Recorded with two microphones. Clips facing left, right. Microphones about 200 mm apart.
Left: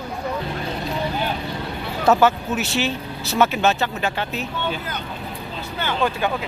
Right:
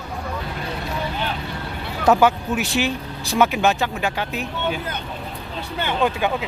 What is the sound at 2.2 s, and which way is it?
Speech, 15° right (ahead or behind).